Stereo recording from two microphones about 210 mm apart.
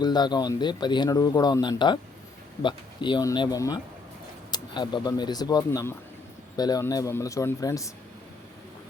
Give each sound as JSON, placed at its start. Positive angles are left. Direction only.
{"t": 0.0, "sound": "speech", "side_deg": 20}